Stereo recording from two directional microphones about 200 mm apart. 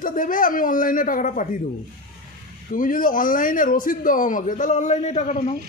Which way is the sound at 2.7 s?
40° left (ahead or behind).